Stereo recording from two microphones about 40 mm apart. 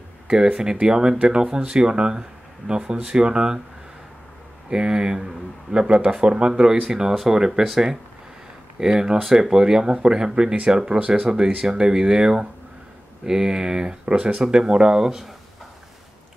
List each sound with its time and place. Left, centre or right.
0.6 s speech: centre
4.6 s speech: right
6.5 s speech: centre
11.1 s speech: centre